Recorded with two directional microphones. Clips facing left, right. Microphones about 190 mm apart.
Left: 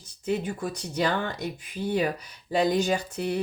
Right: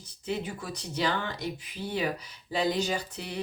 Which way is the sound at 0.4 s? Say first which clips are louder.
Left 6 dB; 50° left (ahead or behind).